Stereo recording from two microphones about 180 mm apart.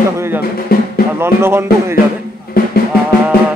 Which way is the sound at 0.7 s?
55° left (ahead or behind).